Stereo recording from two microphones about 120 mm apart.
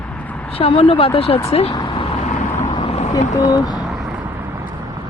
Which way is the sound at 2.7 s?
50° left (ahead or behind).